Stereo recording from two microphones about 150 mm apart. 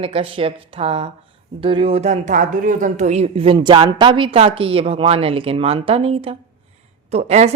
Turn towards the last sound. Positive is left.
turn(degrees=-45)  # may be behind; listen again after turning